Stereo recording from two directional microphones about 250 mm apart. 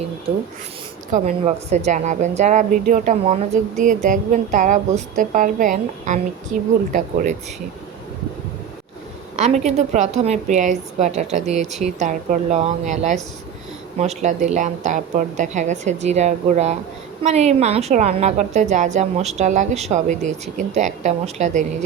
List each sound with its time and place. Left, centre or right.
1.1 s a woman's voice: right
9.3 s a woman's voice: right